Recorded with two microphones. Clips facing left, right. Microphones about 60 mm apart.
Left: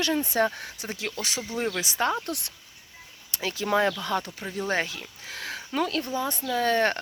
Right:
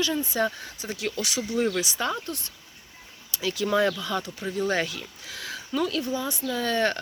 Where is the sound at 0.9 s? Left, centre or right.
Left.